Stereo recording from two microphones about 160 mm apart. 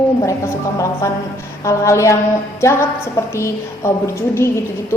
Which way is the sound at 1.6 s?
20° left (ahead or behind).